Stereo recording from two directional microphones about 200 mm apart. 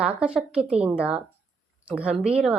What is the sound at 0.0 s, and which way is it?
Speech, 5° right (ahead or behind).